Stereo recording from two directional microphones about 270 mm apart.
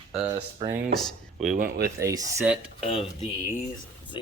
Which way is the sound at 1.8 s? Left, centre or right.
Centre.